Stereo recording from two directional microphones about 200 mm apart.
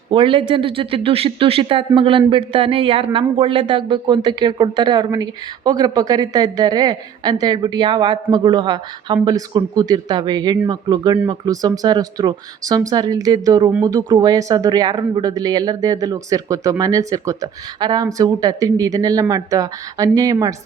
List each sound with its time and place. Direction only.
0.1 s speech: 25° right (ahead or behind)